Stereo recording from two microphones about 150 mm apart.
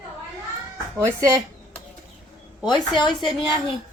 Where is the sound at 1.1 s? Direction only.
20° right (ahead or behind).